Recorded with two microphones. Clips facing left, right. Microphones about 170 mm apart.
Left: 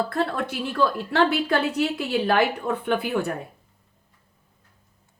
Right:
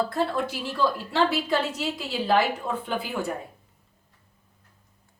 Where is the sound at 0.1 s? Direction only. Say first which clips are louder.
Left 1 dB; 60° left (ahead or behind).